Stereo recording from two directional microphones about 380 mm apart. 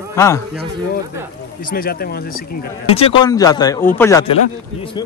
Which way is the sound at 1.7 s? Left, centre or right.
Left.